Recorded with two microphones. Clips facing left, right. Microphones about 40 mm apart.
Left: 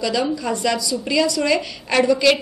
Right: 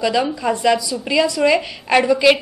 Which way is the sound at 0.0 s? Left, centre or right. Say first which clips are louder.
Right 3 dB; centre.